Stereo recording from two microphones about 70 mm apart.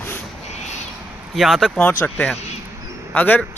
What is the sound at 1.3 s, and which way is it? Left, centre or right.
Speech, centre.